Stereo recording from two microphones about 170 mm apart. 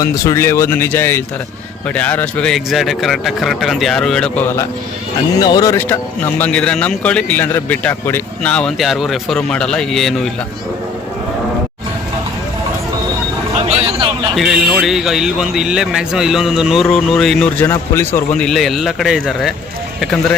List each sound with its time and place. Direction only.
0.0 s a man's voice: 20° left (ahead or behind)
5.4 s speech: 20° left (ahead or behind); by 10.2 s centre (ahead or behind)
13.7 s a sound: 35° right (ahead or behind)
14.3 s a man's voice: centre (ahead or behind)